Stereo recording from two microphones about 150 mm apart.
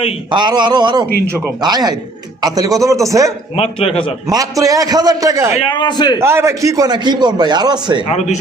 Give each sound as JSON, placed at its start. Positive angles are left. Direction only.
{"t": 0.3, "sound": "a man's voice", "side_deg": -30}
{"t": 3.5, "sound": "a man's voice", "side_deg": 40}
{"t": 4.3, "sound": "a man's voice", "side_deg": -25}
{"t": 5.7, "sound": "a man's voice", "side_deg": 30}
{"t": 6.1, "sound": "a man's voice", "side_deg": -15}
{"t": 8.0, "sound": "speech", "side_deg": 45}